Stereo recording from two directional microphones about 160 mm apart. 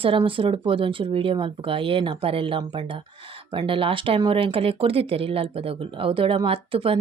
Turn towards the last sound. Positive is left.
turn(degrees=-35)  # may be behind; listen again after turning